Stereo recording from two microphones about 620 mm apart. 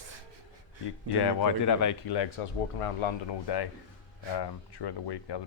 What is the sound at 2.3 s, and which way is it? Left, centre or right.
Speech, left.